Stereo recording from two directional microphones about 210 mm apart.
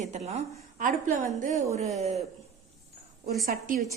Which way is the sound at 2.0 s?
30° right (ahead or behind).